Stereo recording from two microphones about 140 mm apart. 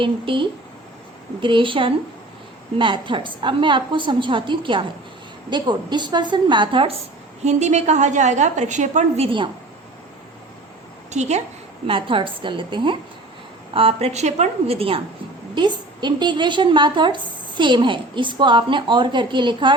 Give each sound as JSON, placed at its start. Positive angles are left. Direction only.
{"t": 0.0, "sound": "a woman's voice", "side_deg": -35}
{"t": 7.4, "sound": "a woman's voice", "side_deg": -55}
{"t": 11.1, "sound": "a woman's voice", "side_deg": -55}
{"t": 11.9, "sound": "a woman's voice", "side_deg": -35}